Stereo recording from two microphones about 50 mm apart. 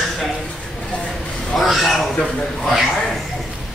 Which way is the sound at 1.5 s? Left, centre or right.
Centre.